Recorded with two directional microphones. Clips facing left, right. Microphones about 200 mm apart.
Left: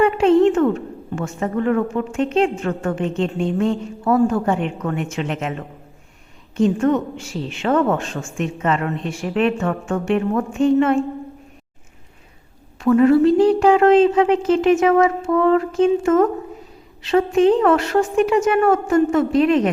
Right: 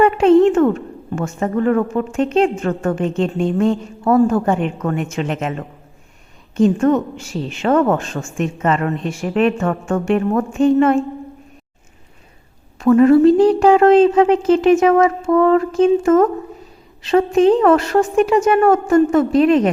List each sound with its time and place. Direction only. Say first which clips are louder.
0.2 s a woman's voice: right 3 dB; 45° right (ahead or behind)
6.6 s a woman's voice: right 3 dB; 45° right (ahead or behind)
12.8 s a woman's voice: right 3 dB; 40° right (ahead or behind)